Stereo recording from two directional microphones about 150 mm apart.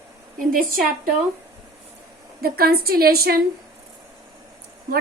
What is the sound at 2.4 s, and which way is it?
A woman's voice, 90° right.